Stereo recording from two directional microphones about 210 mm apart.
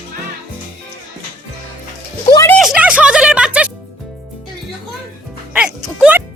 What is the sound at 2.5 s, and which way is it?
Music, 5° right (ahead or behind).